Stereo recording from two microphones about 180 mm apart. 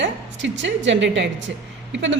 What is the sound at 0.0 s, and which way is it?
A woman's voice, 90° right.